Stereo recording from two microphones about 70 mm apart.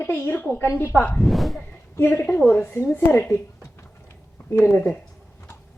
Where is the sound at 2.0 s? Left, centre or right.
Left.